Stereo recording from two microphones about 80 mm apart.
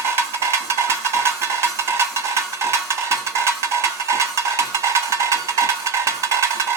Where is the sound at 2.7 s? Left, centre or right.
Right.